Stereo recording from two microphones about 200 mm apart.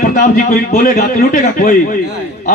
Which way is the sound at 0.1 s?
40° left (ahead or behind).